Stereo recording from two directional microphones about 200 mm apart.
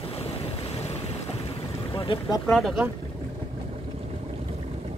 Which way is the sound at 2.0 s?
20° left (ahead or behind).